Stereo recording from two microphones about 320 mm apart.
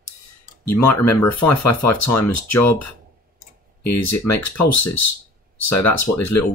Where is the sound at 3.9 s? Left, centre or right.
Left.